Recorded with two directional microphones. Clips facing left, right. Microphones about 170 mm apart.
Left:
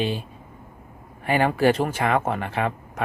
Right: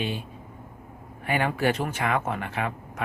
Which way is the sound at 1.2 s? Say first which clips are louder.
Left 5 dB; 35° left (ahead or behind).